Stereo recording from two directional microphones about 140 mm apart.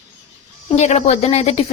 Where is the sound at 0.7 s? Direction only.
55° left (ahead or behind).